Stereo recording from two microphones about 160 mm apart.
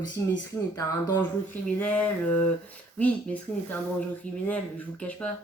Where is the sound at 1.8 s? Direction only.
10° left (ahead or behind).